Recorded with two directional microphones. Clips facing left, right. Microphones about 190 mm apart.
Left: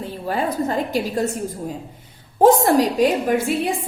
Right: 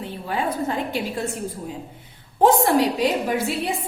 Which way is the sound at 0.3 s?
40° left (ahead or behind).